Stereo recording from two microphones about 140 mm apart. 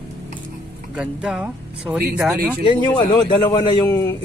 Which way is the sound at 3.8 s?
15° left (ahead or behind).